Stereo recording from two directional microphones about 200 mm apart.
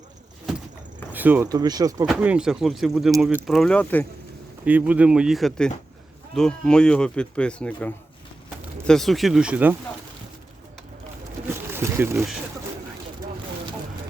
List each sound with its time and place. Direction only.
1.1 s speech: 10° right (ahead or behind)
2.0 s speech: 5° right (ahead or behind)
4.6 s speech: 5° right (ahead or behind)
11.7 s a sound: 10° right (ahead or behind)